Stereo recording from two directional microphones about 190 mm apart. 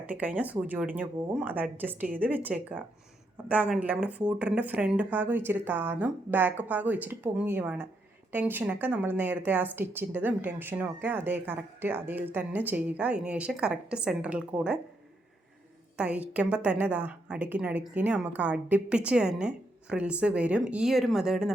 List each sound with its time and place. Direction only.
0.0 s speech: 10° right (ahead or behind)
16.0 s speech: 10° right (ahead or behind)